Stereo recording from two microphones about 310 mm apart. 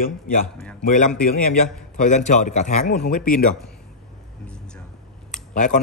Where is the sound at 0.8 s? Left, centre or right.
Left.